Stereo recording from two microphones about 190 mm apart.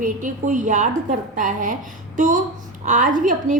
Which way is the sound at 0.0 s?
45° right (ahead or behind).